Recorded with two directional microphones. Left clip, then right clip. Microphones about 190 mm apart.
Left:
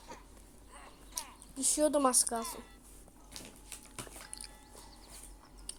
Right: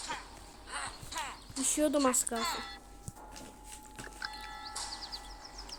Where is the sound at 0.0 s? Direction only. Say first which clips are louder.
Right 11 dB; 45° right (ahead or behind).